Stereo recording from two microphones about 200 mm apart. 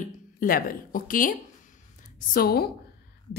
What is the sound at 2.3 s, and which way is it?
Speech, 50° left (ahead or behind).